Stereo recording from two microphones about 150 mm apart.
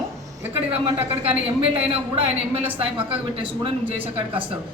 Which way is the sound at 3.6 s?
35° right (ahead or behind).